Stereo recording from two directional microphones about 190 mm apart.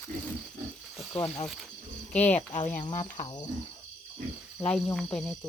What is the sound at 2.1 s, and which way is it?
Speech, 10° left (ahead or behind).